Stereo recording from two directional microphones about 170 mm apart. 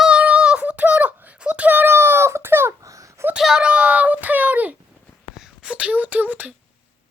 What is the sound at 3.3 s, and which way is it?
A child's voice, 5° right (ahead or behind).